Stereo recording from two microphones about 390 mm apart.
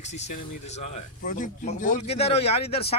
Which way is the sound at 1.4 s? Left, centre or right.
Centre.